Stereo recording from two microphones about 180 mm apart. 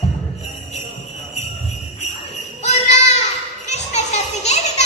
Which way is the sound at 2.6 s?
40° left (ahead or behind).